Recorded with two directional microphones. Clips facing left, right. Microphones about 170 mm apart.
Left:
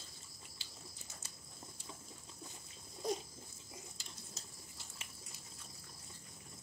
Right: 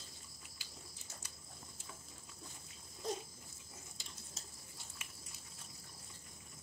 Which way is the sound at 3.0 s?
10° left (ahead or behind).